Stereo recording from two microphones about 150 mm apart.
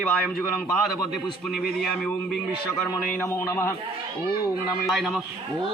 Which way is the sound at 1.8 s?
5° left (ahead or behind).